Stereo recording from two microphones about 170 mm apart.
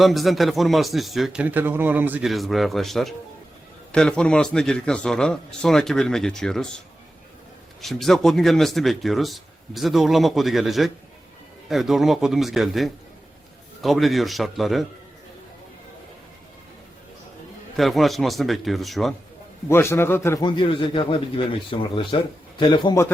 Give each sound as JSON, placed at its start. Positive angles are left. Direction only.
{"t": 0.0, "sound": "speech", "side_deg": 0}
{"t": 17.7, "sound": "speech", "side_deg": 0}
{"t": 19.6, "sound": "a man's voice", "side_deg": 15}
{"t": 20.4, "sound": "a man's voice", "side_deg": 30}